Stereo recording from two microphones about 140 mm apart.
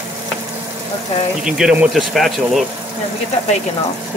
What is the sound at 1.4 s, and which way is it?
Speech, 5° right (ahead or behind).